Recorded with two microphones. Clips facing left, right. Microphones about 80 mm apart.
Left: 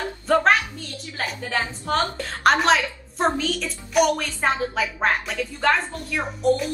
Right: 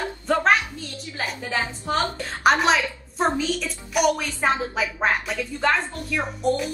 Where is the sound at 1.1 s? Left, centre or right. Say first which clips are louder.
Left 1 dB; centre.